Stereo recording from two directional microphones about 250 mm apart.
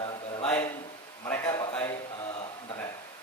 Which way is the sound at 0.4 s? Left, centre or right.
Centre.